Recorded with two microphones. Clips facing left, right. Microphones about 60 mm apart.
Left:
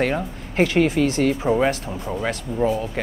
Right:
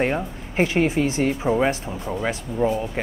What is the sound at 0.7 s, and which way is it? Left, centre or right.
Speech, right.